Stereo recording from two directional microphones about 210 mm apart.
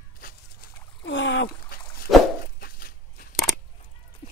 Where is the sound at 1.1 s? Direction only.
60° left (ahead or behind).